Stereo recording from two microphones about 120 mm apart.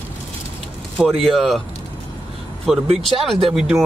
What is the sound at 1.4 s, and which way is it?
Speech, centre (ahead or behind).